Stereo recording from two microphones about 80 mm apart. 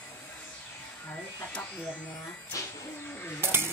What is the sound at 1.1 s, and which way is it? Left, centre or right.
Electric shaver, centre.